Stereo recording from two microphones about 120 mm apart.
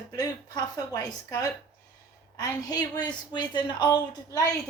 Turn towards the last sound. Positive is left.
turn(degrees=30)  # may be behind; listen again after turning